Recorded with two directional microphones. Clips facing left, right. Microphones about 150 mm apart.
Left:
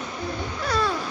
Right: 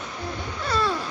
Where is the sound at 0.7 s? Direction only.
Centre (ahead or behind).